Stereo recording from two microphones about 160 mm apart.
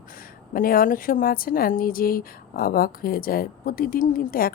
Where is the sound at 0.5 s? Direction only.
60° left (ahead or behind).